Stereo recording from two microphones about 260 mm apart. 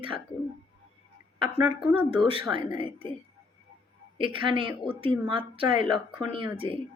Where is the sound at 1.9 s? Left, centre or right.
Centre.